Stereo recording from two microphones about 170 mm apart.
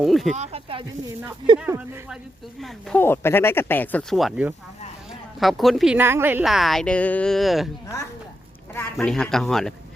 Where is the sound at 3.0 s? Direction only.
15° left (ahead or behind); by 6.4 s 15° right (ahead or behind).